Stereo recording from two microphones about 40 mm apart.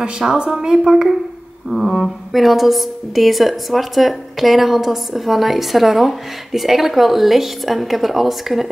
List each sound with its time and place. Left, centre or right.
0.2 s a woman's voice: centre
1.7 s a woman's voice: centre